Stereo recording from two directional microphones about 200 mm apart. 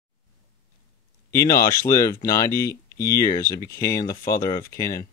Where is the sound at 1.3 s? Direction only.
15° left (ahead or behind).